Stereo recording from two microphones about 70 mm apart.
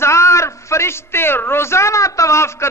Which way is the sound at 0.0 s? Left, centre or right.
Left.